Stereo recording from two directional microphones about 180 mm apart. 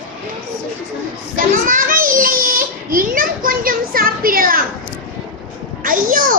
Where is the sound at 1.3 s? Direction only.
50° right (ahead or behind).